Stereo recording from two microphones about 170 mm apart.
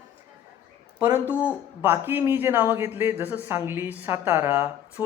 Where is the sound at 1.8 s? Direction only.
15° right (ahead or behind).